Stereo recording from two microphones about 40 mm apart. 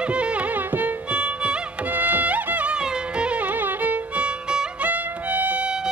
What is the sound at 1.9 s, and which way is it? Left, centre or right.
Music, right.